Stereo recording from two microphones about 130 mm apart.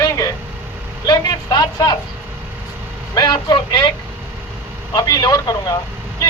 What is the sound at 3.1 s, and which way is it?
Speech, 30° left (ahead or behind).